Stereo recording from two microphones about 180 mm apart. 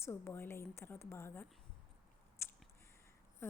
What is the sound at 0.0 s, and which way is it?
A woman's voice, 15° left (ahead or behind).